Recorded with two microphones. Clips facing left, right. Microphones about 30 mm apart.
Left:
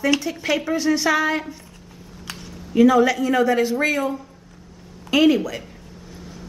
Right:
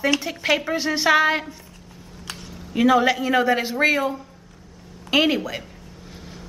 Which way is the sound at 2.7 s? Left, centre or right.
Right.